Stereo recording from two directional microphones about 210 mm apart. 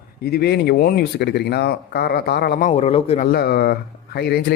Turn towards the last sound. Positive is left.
turn(degrees=50)  # may be behind; listen again after turning